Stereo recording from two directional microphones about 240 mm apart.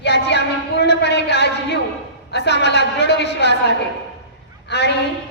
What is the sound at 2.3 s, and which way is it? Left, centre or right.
A woman's voice, left.